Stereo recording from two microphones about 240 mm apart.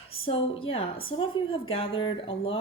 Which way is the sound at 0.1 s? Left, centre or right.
Left.